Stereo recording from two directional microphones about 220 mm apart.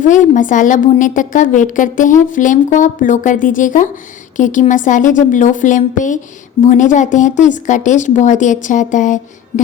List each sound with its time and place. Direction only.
0.0 s a woman's voice: 35° left (ahead or behind)